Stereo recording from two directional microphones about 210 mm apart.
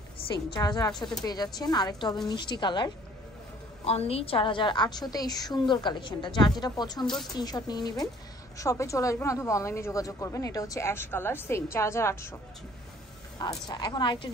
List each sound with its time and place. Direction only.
0.2 s a sound: 25° left (ahead or behind)
0.6 s a woman's voice: 20° left (ahead or behind)
13.4 s a woman's voice: 20° left (ahead or behind)